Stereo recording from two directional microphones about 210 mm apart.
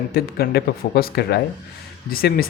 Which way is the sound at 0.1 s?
50° left (ahead or behind).